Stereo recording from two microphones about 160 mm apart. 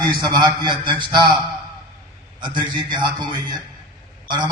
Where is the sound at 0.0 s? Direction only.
25° right (ahead or behind).